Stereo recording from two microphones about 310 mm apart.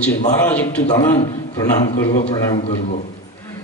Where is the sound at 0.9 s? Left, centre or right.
Centre.